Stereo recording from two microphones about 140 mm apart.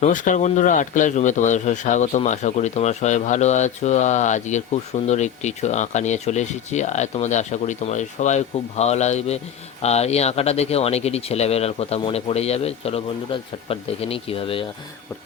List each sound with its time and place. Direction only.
0.0 s speech: 65° left (ahead or behind); by 14.6 s 40° left (ahead or behind)